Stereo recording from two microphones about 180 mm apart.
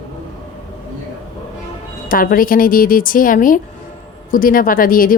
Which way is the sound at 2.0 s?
50° left (ahead or behind).